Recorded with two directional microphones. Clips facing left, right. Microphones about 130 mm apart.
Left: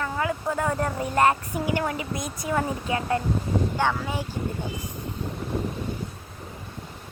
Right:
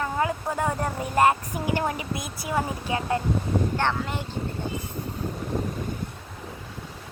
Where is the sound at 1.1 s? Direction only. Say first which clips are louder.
Right 1 dB; 20° right (ahead or behind).